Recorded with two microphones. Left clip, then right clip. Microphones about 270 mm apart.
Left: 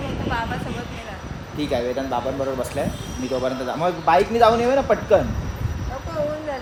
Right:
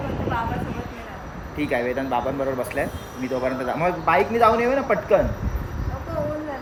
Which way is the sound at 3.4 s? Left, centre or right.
Centre.